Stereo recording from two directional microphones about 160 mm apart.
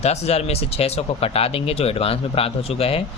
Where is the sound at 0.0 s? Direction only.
40° left (ahead or behind).